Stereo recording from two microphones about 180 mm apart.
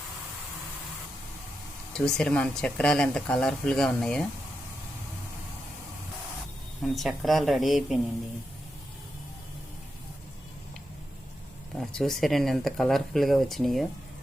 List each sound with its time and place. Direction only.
1.9 s speech: 5° left (ahead or behind)
6.8 s speech: centre (ahead or behind)
11.8 s speech: 5° left (ahead or behind)